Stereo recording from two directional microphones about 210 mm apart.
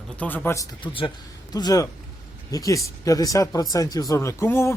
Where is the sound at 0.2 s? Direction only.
10° left (ahead or behind).